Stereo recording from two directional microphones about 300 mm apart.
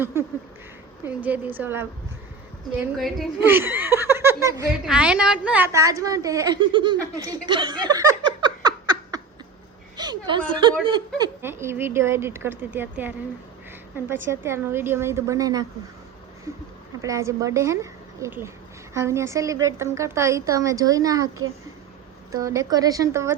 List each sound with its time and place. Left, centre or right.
0.0 s speech: centre
7.9 s a sound: centre
10.0 s speech: centre
17.0 s speech: centre
22.3 s speech: centre